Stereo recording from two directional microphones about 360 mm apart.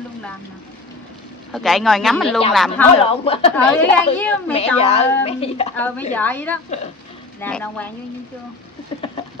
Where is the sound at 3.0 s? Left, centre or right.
Centre.